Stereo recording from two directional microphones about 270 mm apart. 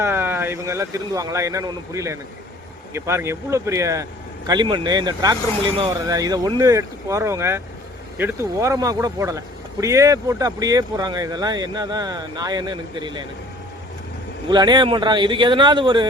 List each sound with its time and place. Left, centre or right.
0.0 s speech: centre
14.5 s speech: centre